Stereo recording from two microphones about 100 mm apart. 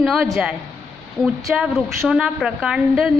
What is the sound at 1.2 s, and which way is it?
A woman's voice, 5° right (ahead or behind).